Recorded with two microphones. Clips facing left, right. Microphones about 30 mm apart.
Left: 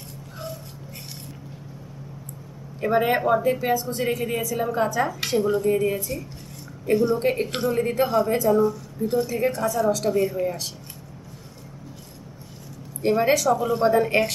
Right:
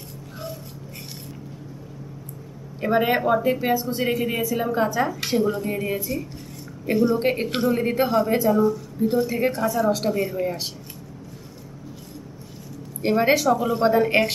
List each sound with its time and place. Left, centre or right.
2.8 s a woman's voice: centre
7.2 s a woman's voice: right
7.4 s a woman's voice: centre
9.3 s a woman's voice: right
9.6 s a woman's voice: centre
10.4 s a woman's voice: centre
13.0 s a woman's voice: centre
13.5 s a woman's voice: centre